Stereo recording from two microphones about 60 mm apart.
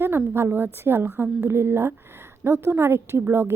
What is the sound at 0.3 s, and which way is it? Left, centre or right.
A woman's voice, right.